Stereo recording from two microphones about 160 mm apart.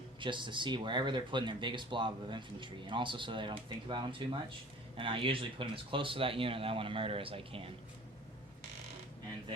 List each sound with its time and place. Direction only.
0.2 s speech: 30° right (ahead or behind)